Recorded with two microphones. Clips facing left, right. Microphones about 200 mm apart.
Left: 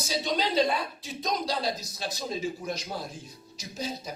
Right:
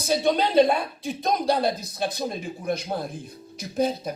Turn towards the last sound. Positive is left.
turn(degrees=-55)  # may be behind; listen again after turning